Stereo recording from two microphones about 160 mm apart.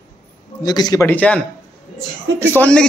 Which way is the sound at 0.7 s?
25° left (ahead or behind).